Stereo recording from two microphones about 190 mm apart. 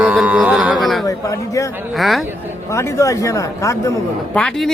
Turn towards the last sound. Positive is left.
turn(degrees=5)  # may be behind; listen again after turning